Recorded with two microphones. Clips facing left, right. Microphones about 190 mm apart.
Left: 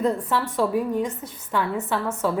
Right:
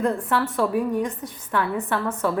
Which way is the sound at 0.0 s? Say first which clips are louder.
Even; 10° left (ahead or behind).